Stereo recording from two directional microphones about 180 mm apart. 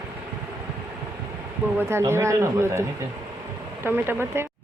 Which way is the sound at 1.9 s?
15° right (ahead or behind).